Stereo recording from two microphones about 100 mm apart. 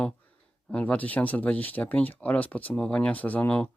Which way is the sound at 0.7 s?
15° left (ahead or behind).